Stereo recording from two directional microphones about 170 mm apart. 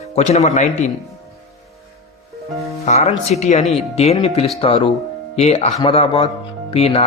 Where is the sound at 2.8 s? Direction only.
40° left (ahead or behind).